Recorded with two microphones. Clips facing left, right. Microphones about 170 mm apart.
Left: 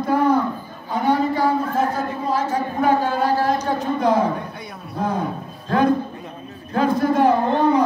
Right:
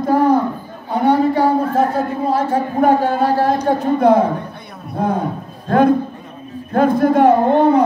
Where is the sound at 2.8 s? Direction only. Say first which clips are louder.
Right 4 dB; 55° right (ahead or behind).